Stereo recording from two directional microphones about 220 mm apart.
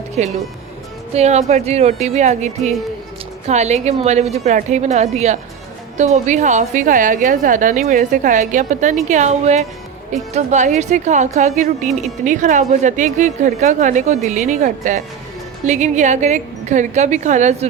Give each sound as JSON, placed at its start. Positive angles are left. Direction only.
{"t": 0.2, "sound": "a woman's voice", "side_deg": -30}